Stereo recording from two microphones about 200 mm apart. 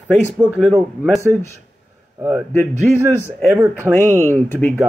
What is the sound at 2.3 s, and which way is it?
Speech, 10° left (ahead or behind).